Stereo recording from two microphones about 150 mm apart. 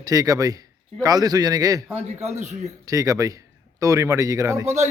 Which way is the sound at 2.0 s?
50° right (ahead or behind).